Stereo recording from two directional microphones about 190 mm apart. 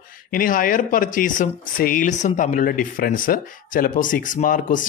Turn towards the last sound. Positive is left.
turn(degrees=45)  # may be behind; listen again after turning